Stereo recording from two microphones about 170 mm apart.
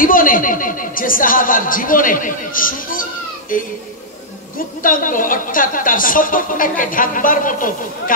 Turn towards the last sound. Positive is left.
turn(degrees=50)  # may be behind; listen again after turning